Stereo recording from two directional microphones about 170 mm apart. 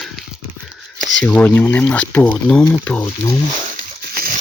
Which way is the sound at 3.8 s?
60° right (ahead or behind).